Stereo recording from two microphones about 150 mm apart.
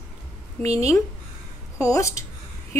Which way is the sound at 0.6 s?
45° right (ahead or behind).